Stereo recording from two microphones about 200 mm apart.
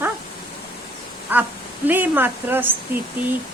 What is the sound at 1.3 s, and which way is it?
Speech, 10° right (ahead or behind).